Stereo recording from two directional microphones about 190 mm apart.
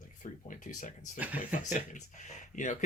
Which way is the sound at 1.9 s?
40° left (ahead or behind).